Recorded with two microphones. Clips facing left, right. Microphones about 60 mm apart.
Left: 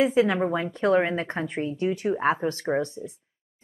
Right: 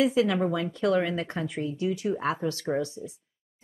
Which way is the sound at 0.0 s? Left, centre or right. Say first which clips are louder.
Left 2 dB; left.